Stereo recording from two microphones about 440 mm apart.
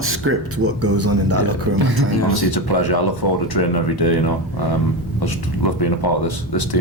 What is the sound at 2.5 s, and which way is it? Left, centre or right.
Speech, left.